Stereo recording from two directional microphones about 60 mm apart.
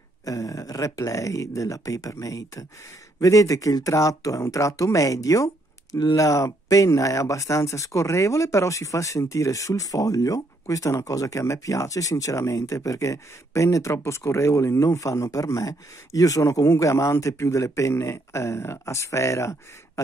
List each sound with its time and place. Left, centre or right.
0.2 s speech: left
15.0 s speech: left